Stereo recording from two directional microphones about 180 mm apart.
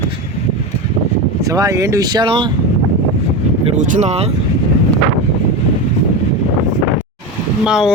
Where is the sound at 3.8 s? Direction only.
40° right (ahead or behind).